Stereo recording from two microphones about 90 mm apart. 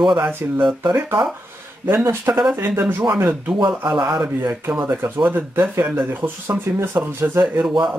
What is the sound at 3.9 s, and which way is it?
Speech, 45° right (ahead or behind).